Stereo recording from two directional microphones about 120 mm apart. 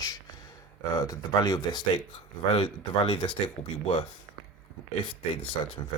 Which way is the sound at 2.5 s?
50° left (ahead or behind).